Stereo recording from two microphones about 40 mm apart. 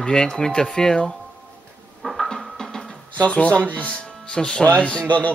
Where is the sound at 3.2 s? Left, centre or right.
Left.